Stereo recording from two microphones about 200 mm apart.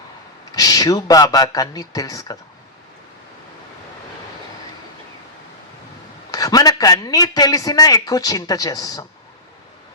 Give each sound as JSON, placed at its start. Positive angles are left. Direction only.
{"t": 0.5, "sound": "a man's voice", "side_deg": 20}
{"t": 6.3, "sound": "a man's voice", "side_deg": 20}